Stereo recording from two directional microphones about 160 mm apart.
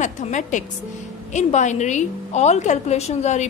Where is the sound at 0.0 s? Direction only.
50° left (ahead or behind).